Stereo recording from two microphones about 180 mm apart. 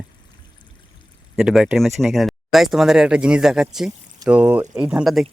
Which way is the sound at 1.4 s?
Centre (ahead or behind).